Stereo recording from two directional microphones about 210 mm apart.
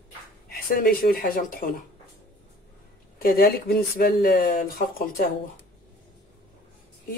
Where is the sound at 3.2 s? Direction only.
45° left (ahead or behind).